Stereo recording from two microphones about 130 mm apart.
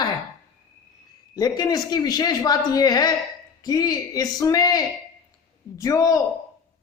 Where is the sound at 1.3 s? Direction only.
30° left (ahead or behind).